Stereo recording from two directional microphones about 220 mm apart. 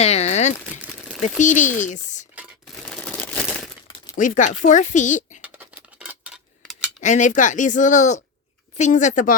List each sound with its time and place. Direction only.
0.0 s crumpling: 30° left (ahead or behind)
0.8 s crumpling: 5° right (ahead or behind)
1.2 s speech: 35° left (ahead or behind)
2.8 s crumpling: 5° left (ahead or behind)
4.1 s speech: 35° left (ahead or behind)
5.4 s a sound: 5° right (ahead or behind)
7.0 s speech: 35° left (ahead or behind)